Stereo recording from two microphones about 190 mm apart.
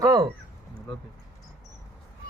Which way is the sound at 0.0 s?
20° right (ahead or behind).